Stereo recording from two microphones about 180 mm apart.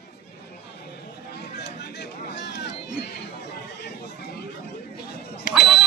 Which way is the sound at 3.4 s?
70° left (ahead or behind).